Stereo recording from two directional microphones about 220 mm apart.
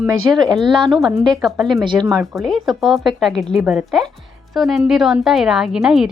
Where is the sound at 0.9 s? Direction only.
Centre (ahead or behind).